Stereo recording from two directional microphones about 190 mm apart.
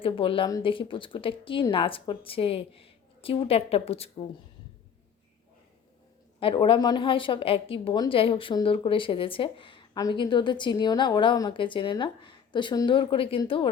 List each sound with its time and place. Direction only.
0.0 s a woman's voice: 30° left (ahead or behind)
6.4 s a woman's voice: 25° left (ahead or behind)